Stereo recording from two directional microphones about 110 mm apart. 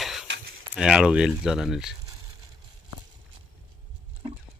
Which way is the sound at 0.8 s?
5° right (ahead or behind).